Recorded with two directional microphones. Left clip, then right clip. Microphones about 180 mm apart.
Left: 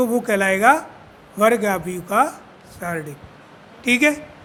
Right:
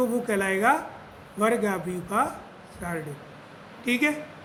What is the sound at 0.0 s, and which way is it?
A man's voice, 55° left (ahead or behind).